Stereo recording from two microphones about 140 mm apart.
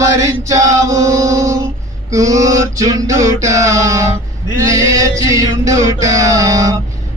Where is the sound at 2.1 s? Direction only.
25° right (ahead or behind).